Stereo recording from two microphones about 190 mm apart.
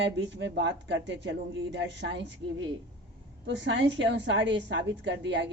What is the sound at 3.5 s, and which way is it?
A woman's voice, 70° right (ahead or behind).